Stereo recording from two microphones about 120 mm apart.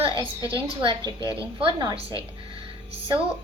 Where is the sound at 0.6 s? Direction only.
45° right (ahead or behind).